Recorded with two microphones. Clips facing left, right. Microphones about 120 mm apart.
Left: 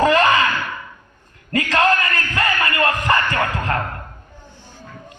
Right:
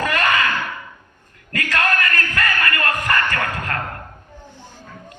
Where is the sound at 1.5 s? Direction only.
25° left (ahead or behind).